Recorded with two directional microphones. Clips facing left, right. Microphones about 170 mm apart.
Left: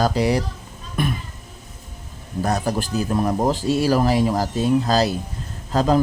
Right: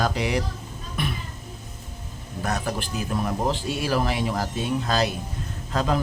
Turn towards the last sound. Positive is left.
turn(degrees=35)  # may be behind; listen again after turning